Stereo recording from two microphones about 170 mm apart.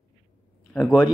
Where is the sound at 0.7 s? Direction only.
Centre (ahead or behind).